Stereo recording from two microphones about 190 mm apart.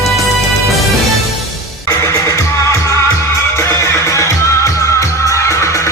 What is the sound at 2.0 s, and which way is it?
Music, 15° left (ahead or behind).